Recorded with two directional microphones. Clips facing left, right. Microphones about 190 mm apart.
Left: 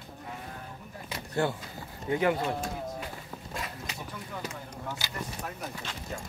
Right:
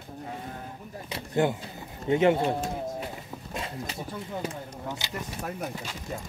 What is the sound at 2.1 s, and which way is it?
Speech, 25° right (ahead or behind).